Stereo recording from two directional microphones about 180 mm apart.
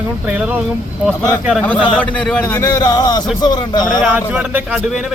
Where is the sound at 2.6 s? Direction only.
20° left (ahead or behind).